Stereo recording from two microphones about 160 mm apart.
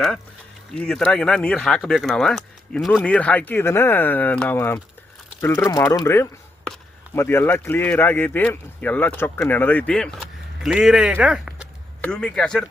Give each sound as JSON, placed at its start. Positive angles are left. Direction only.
{"t": 0.8, "sound": "speech", "side_deg": 5}
{"t": 12.0, "sound": "speech", "side_deg": 5}